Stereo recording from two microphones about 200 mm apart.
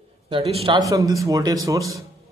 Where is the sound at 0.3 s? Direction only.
30° right (ahead or behind).